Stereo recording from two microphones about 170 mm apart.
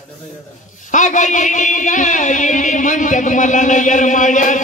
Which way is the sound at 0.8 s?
45° left (ahead or behind).